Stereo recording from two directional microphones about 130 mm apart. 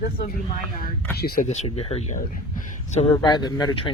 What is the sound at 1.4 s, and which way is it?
Speech, 60° left (ahead or behind).